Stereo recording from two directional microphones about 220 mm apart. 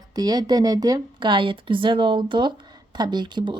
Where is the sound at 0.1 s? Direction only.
15° right (ahead or behind).